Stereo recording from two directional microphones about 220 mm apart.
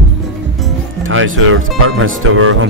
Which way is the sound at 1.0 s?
65° right (ahead or behind).